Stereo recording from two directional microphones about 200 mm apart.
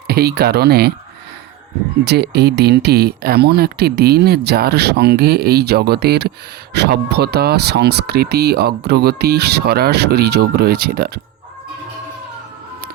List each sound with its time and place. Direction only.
0.1 s speech: 50° right (ahead or behind)
2.0 s speech: 55° right (ahead or behind)